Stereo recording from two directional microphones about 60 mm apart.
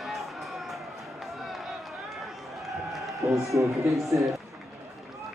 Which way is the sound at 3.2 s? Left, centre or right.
Right.